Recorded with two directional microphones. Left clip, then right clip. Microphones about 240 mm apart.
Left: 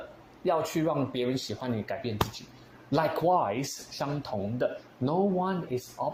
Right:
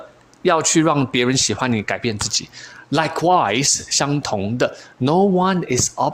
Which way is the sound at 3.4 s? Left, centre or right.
Right.